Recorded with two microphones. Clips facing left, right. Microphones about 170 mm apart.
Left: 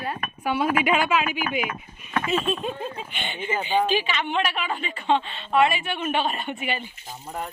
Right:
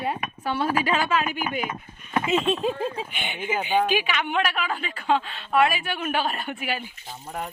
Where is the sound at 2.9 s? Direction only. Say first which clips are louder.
Right 1 dB; 5° right (ahead or behind).